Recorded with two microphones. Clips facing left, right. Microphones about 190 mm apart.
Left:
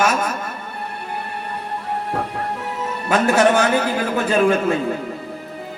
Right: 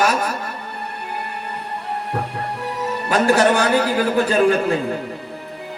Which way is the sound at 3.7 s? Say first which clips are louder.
Right 2 dB; 35° right (ahead or behind).